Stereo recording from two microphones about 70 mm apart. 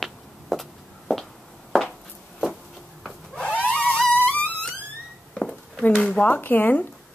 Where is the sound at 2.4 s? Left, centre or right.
Centre.